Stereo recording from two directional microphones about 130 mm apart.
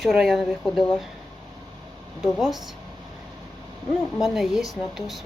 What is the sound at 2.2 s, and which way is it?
Speech, centre (ahead or behind).